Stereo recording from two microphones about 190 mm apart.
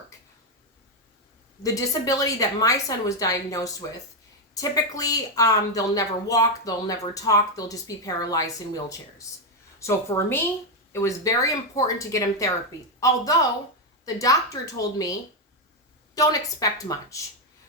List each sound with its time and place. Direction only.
1.6 s a woman's voice: 15° left (ahead or behind)
16.1 s a woman's voice: 20° left (ahead or behind)